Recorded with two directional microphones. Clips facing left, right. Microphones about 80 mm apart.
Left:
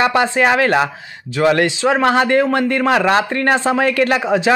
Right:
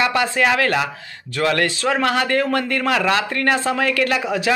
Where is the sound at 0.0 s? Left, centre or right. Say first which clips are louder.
Left 4 dB; left.